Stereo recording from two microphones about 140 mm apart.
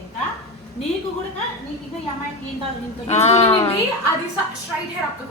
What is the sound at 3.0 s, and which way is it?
Speech, 50° left (ahead or behind).